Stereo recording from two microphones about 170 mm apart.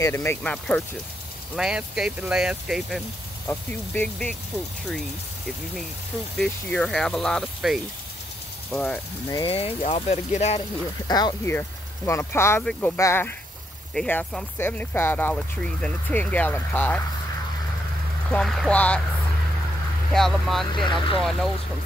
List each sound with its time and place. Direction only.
0.0 s speech: 15° left (ahead or behind)
1.6 s speech: 5° right (ahead or behind)
3.4 s speech: 10° left (ahead or behind)
6.3 s speech: 5° left (ahead or behind)
9.3 s speech: 30° left (ahead or behind)
11.1 s speech: 25° left (ahead or behind)
18.3 s speech: centre (ahead or behind)
20.1 s speech: centre (ahead or behind)
20.7 s speech: 30° left (ahead or behind)
21.2 s speech: centre (ahead or behind)